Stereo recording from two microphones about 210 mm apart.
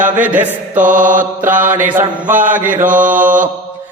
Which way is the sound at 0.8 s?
40° right (ahead or behind).